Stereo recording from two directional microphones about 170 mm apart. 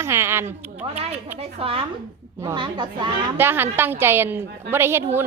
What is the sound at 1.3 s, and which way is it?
Speech, 35° right (ahead or behind).